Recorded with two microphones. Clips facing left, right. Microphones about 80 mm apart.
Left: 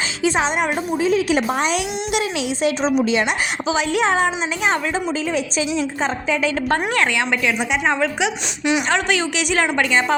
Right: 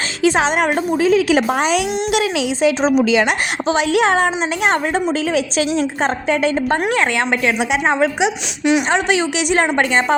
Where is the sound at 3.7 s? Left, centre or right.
Right.